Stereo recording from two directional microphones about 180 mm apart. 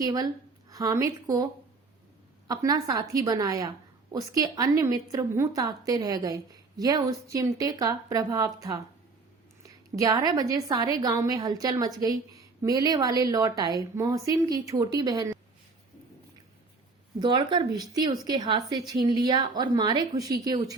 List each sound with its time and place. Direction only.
0.0 s a woman's voice: 20° right (ahead or behind)
2.5 s a woman's voice: 20° right (ahead or behind)
17.2 s a woman's voice: 25° right (ahead or behind)